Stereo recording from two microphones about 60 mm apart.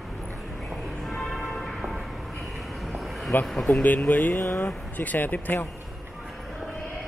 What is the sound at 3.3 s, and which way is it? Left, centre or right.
Speech, left.